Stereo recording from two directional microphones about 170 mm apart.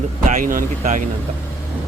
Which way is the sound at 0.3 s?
50° right (ahead or behind).